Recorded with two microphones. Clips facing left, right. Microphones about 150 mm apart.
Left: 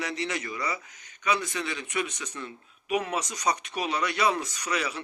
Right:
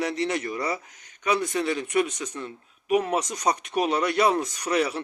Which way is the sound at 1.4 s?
45° right (ahead or behind).